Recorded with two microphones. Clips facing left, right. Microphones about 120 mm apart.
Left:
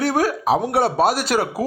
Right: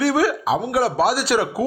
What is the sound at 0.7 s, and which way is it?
Speech, 55° left (ahead or behind).